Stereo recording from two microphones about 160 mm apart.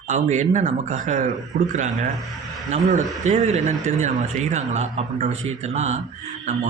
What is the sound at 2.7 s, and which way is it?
Speech, 50° right (ahead or behind).